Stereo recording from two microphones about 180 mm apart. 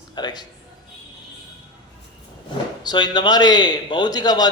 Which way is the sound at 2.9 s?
25° left (ahead or behind).